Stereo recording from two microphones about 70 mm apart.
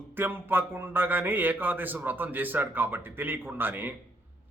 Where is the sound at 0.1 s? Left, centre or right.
Right.